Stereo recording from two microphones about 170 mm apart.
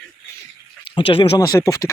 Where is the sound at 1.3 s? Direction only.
20° left (ahead or behind).